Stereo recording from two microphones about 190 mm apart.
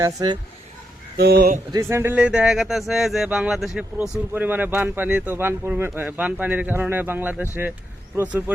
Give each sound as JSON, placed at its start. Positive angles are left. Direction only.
{"t": 0.0, "sound": "speech", "side_deg": -20}
{"t": 1.1, "sound": "speech", "side_deg": -55}
{"t": 1.7, "sound": "speech", "side_deg": -15}